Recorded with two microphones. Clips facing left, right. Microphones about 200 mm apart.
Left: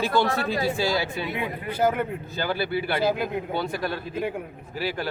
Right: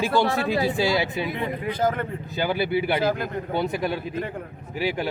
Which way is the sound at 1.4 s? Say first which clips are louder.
Left 1 dB; 10° left (ahead or behind).